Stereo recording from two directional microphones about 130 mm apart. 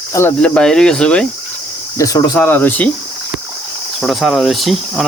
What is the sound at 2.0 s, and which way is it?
Speech, 30° left (ahead or behind).